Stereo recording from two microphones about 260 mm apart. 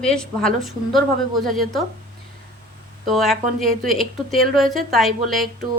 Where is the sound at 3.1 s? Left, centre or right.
Centre.